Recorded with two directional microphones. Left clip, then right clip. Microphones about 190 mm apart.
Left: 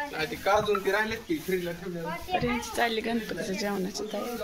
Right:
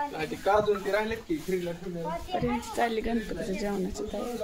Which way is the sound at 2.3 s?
5° right (ahead or behind).